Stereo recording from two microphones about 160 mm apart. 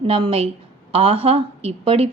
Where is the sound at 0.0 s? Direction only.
35° right (ahead or behind).